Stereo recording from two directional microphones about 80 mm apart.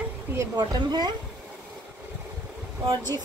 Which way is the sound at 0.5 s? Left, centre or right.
Right.